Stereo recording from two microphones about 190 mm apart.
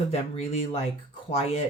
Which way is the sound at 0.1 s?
35° left (ahead or behind).